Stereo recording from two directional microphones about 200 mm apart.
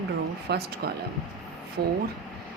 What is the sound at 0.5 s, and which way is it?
Speech, 55° right (ahead or behind).